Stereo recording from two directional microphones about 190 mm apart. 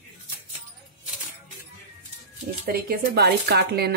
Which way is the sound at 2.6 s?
55° right (ahead or behind).